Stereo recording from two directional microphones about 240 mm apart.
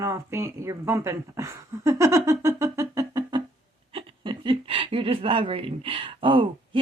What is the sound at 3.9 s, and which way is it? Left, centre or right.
Speech, right.